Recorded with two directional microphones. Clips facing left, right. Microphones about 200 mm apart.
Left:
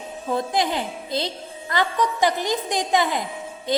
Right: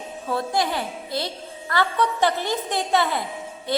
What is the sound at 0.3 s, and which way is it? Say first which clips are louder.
A woman's voice: left 1 dB; 20° left (ahead or behind).